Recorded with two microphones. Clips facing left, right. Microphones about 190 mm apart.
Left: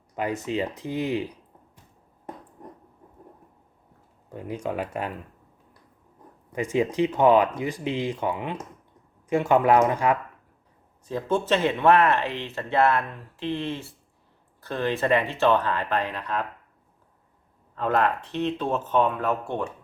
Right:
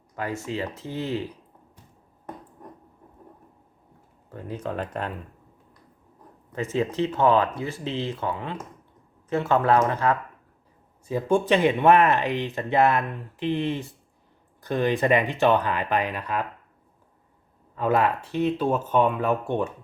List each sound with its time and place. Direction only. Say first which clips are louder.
0.2 s speech: left 3 dB; 15° left (ahead or behind)
4.3 s speech: left 1 dB; 15° left (ahead or behind)
6.5 s speech: left 2 dB; 15° left (ahead or behind)
11.0 s speech: right 3 dB; 10° right (ahead or behind)
17.7 s speech: right 1 dB; 10° right (ahead or behind)